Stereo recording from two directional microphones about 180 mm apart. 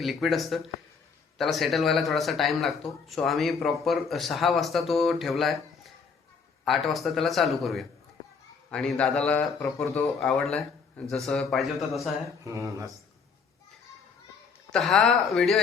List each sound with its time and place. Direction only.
0.0 s speech: centre (ahead or behind)
12.5 s speech: 15° right (ahead or behind)
14.7 s speech: centre (ahead or behind)